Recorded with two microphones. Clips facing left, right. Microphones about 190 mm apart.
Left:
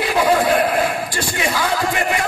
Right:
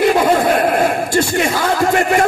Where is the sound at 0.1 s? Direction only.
45° right (ahead or behind).